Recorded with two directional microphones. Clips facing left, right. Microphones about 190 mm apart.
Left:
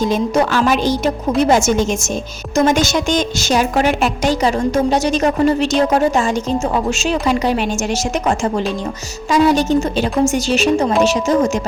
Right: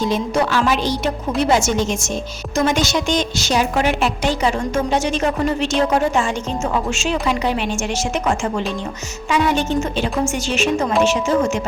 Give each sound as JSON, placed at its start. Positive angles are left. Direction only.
{"t": 0.0, "sound": "a woman's voice", "side_deg": 45}